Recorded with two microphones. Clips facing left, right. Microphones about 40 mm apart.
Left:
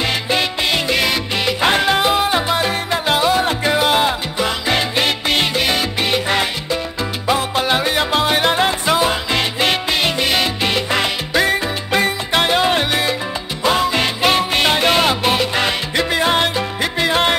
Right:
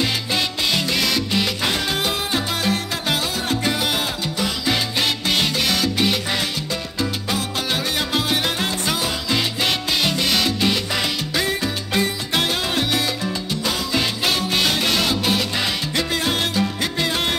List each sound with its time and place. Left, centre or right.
0.0 s salsa music: left
1.7 s music: left
7.0 s salsa music: left
8.3 s music: left
12.3 s salsa music: left
13.7 s music: left